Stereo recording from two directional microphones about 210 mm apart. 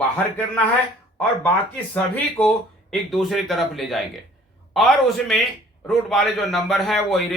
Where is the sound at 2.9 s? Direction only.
Centre (ahead or behind).